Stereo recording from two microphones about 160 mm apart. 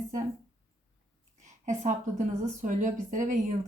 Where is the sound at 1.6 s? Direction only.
45° right (ahead or behind).